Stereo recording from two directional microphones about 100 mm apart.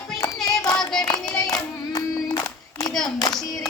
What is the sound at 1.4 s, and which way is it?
Child singing, 40° left (ahead or behind).